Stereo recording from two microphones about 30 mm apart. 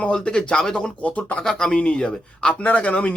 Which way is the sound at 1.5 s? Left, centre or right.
Left.